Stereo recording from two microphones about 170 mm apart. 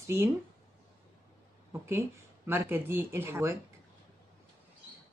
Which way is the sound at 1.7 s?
15° right (ahead or behind).